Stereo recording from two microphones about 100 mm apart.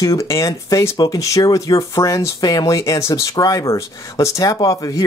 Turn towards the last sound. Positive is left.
turn(degrees=35)  # may be behind; listen again after turning